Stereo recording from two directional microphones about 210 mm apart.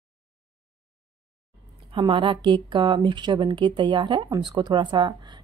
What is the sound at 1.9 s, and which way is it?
Speech, 25° right (ahead or behind).